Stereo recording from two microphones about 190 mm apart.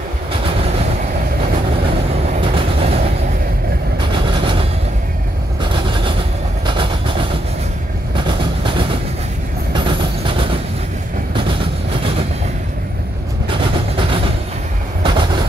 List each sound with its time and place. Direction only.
0.3 s train: 30° right (ahead or behind)
2.3 s train: 30° right (ahead or behind)
4.1 s a sound: 25° right (ahead or behind)
5.6 s train: 25° right (ahead or behind)
8.3 s vehicle: 25° right (ahead or behind)
9.8 s train: 25° right (ahead or behind)
13.5 s vehicle: 30° right (ahead or behind)
15.0 s train: 25° right (ahead or behind)